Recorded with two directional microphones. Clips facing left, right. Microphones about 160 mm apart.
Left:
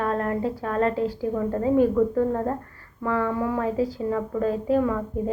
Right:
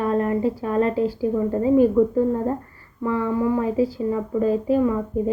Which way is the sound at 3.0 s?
10° right (ahead or behind).